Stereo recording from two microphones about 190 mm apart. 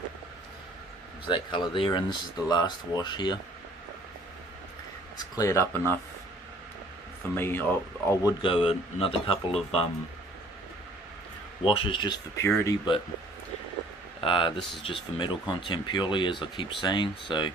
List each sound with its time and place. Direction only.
1.3 s speech: 25° left (ahead or behind)
5.3 s speech: 15° left (ahead or behind)
7.3 s speech: 10° left (ahead or behind); by 9.9 s 30° left (ahead or behind)
11.6 s speech: 30° left (ahead or behind)
14.2 s speech: 25° left (ahead or behind)